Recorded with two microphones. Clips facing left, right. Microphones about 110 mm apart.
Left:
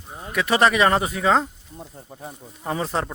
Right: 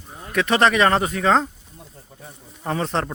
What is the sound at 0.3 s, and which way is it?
Speech, 10° left (ahead or behind).